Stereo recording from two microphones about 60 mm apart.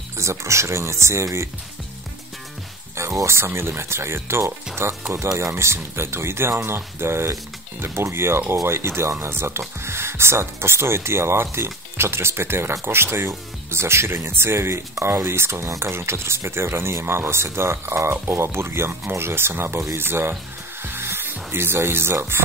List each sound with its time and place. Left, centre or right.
0.2 s speech: right
3.0 s speech: right
20.8 s music: right